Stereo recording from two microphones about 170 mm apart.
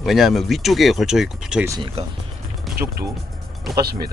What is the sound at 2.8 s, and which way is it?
Speech, 20° right (ahead or behind).